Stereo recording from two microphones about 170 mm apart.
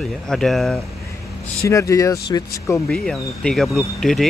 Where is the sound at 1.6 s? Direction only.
20° left (ahead or behind).